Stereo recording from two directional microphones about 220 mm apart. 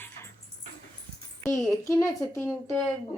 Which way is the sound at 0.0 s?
10° left (ahead or behind).